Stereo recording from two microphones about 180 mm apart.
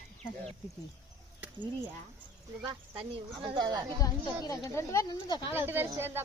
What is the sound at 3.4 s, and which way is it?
Speech, 25° right (ahead or behind).